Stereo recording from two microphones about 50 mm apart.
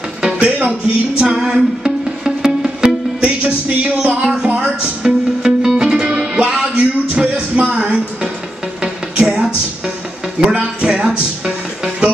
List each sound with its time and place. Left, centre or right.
0.2 s music: right
10.5 s music: right